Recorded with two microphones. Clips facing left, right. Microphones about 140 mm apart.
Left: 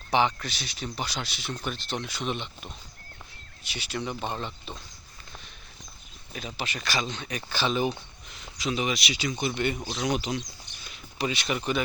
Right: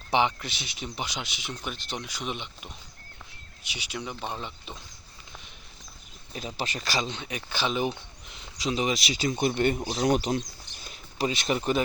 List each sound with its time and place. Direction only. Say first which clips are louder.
0.1 s speech: even; 20° right (ahead or behind)
3.7 s speech: left 3 dB; 15° right (ahead or behind)
4.0 s speech: left 3 dB; centre (ahead or behind)
4.4 s speech: left 3 dB; 10° right (ahead or behind)
6.3 s speech: right 2 dB; 35° right (ahead or behind); by 7.9 s 15° right (ahead or behind)
8.3 s speech: right 1 dB; 25° right (ahead or behind)